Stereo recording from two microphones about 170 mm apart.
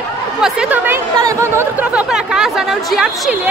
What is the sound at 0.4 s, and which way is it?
Speech, 5° right (ahead or behind).